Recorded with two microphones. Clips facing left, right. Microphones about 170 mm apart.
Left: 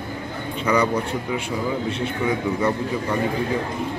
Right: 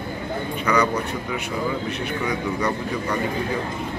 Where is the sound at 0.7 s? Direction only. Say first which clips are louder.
Left 1 dB; 30° left (ahead or behind).